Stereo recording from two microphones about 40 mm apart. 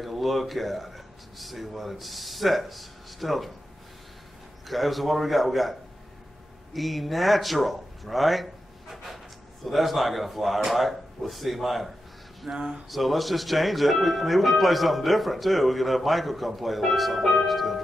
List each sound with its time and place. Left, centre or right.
0.0 s speech: centre
4.6 s speech: centre
12.4 s speech: centre
12.9 s speech: centre